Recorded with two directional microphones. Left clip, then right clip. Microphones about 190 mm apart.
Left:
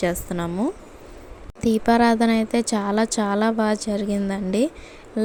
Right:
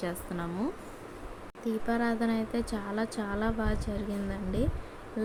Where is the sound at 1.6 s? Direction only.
45° left (ahead or behind).